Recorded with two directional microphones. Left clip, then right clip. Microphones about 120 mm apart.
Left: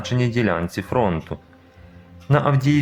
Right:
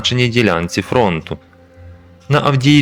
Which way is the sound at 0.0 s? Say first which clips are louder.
Right 8 dB; 30° right (ahead or behind).